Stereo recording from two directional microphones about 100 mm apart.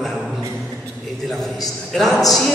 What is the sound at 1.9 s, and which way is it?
Speech, centre (ahead or behind).